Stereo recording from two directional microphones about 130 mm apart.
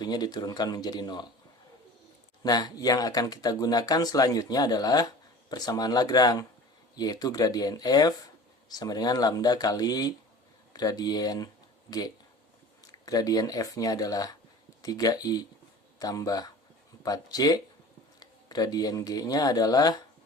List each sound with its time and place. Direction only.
0.0 s speech: 30° left (ahead or behind)
2.4 s speech: 30° left (ahead or behind)